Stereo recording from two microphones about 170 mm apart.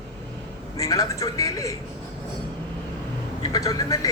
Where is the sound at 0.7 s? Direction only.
20° left (ahead or behind).